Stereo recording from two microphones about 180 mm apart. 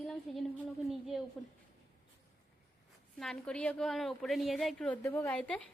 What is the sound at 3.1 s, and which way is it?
A woman's voice, 5° left (ahead or behind).